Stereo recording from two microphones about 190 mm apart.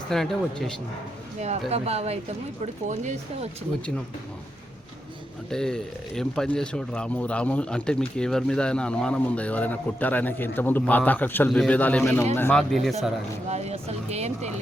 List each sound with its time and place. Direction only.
0.1 s speech: centre (ahead or behind)
1.4 s speech: 35° right (ahead or behind)
5.5 s speech: 5° left (ahead or behind)
13.5 s speech: 35° right (ahead or behind)